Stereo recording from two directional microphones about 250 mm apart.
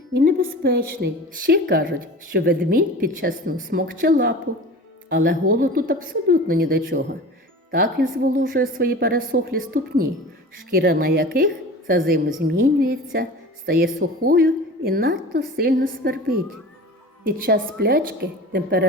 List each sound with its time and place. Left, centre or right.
0.2 s a woman's voice: right